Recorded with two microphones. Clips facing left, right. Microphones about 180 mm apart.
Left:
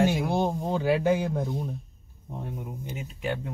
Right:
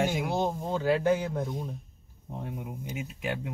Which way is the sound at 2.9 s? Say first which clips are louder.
Left 2 dB; 10° right (ahead or behind).